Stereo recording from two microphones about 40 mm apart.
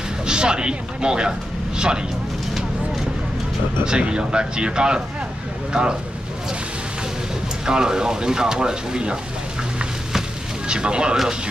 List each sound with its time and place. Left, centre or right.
0.3 s speech: right
3.8 s speech: right
7.6 s speech: centre
10.7 s speech: right